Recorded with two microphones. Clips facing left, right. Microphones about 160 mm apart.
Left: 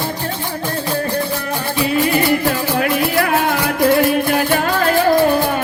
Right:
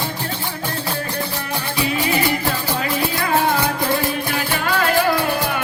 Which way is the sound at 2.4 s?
65° left (ahead or behind).